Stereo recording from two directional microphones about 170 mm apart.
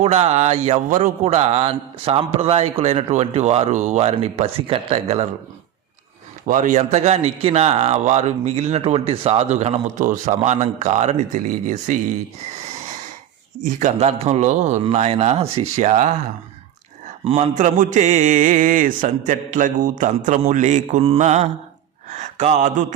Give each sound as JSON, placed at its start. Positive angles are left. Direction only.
{"t": 0.0, "sound": "a man's voice", "side_deg": -40}
{"t": 6.5, "sound": "a man's voice", "side_deg": -45}
{"t": 13.6, "sound": "a man's voice", "side_deg": -50}
{"t": 17.2, "sound": "mantra", "side_deg": -40}